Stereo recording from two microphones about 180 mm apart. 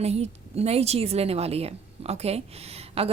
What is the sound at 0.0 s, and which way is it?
A woman's voice, 35° right (ahead or behind).